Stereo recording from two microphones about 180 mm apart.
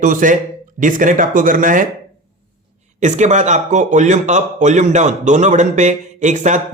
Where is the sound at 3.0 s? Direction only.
40° right (ahead or behind).